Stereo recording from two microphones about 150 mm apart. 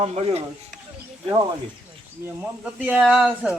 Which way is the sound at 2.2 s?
10° right (ahead or behind).